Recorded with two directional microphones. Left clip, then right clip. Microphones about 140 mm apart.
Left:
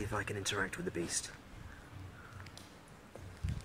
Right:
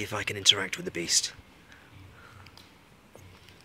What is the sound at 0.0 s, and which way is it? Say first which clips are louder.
Speech: right 6 dB; 20° right (ahead or behind).